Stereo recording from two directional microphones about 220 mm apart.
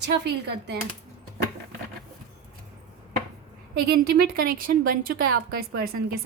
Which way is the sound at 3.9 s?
45° right (ahead or behind).